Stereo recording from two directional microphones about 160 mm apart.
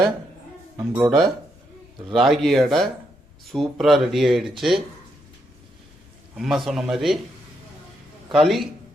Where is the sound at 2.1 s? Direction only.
Centre (ahead or behind).